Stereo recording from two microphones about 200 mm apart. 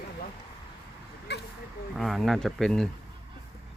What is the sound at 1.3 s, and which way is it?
Vehicle, 55° left (ahead or behind).